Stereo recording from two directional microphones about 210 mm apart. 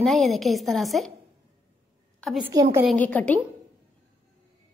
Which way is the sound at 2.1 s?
Centre (ahead or behind).